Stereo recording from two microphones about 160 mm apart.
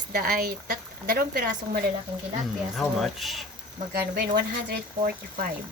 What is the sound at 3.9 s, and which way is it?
Speech, 70° right (ahead or behind).